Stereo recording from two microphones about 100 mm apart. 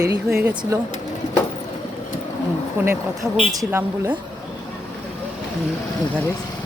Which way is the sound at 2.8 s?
20° right (ahead or behind).